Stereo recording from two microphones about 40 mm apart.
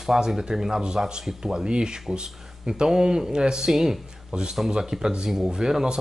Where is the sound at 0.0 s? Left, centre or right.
Centre.